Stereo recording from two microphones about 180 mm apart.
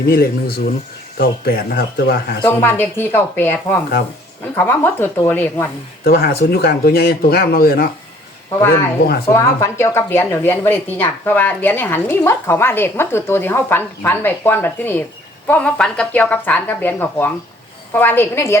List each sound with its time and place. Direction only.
0.1 s speech: 60° left (ahead or behind)
2.4 s a woman's voice: 10° left (ahead or behind)
6.1 s speech: 60° left (ahead or behind)
9.3 s a woman's voice: 15° left (ahead or behind)